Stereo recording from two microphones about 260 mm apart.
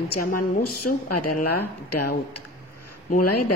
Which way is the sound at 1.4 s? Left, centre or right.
Left.